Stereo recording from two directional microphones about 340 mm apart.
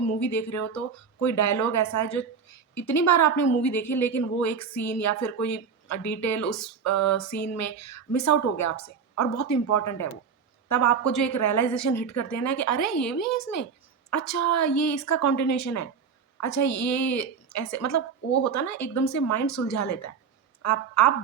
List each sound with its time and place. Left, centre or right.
0.0 s a woman's voice: left